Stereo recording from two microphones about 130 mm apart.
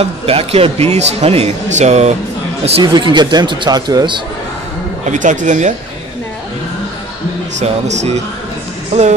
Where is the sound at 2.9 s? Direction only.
35° right (ahead or behind).